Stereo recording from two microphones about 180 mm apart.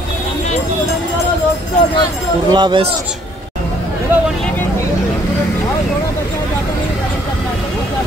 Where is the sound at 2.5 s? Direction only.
25° right (ahead or behind).